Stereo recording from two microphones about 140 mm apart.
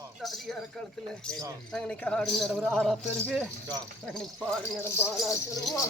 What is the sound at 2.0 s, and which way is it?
Speech, 5° left (ahead or behind).